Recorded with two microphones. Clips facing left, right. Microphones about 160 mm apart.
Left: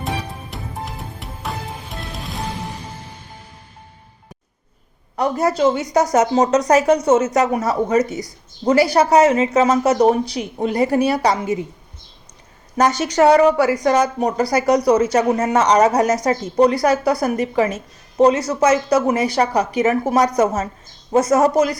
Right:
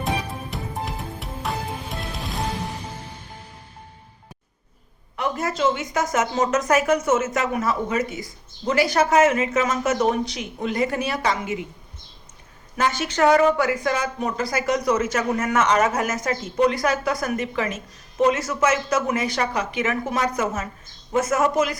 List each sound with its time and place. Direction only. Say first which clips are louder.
0.5 s music: right 1 dB; centre (ahead or behind)
5.1 s a woman's voice: left 7 dB; 35° left (ahead or behind)
12.7 s a woman's voice: left 7 dB; 40° left (ahead or behind)